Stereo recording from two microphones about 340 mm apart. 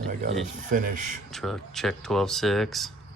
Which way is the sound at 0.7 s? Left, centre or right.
Right.